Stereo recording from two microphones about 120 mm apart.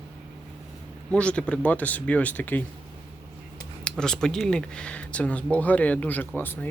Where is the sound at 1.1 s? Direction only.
10° left (ahead or behind).